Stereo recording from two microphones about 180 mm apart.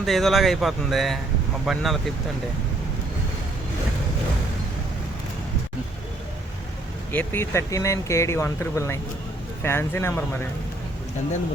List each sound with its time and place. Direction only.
0.0 s speech: centre (ahead or behind)
7.1 s speech: 10° left (ahead or behind)